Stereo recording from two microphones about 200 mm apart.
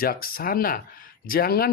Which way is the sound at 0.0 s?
50° left (ahead or behind).